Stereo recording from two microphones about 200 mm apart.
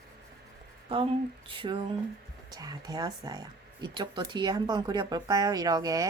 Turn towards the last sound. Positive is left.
turn(degrees=-20)  # may be behind; listen again after turning